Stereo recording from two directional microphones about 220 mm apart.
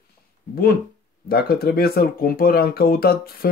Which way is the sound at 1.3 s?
45° left (ahead or behind).